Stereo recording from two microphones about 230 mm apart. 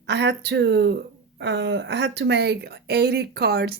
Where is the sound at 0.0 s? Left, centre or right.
Right.